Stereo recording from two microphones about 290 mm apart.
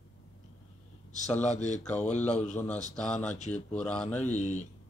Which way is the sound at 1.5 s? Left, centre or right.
Left.